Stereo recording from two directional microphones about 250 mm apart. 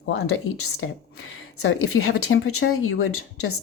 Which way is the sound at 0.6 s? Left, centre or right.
Left.